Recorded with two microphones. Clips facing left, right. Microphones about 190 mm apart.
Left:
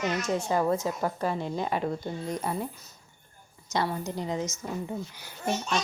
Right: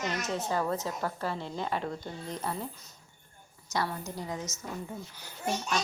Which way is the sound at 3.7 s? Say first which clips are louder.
Left 4 dB; 20° left (ahead or behind).